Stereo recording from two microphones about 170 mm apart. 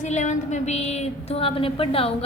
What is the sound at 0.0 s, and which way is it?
Speech, 45° left (ahead or behind).